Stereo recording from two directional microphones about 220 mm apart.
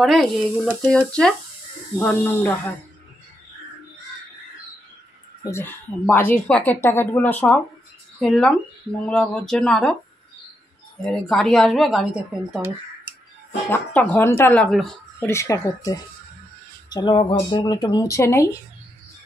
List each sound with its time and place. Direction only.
0.0 s speech: centre (ahead or behind)
5.4 s speech: 10° left (ahead or behind)
11.1 s speech: 5° left (ahead or behind)
13.7 s speech: 5° left (ahead or behind)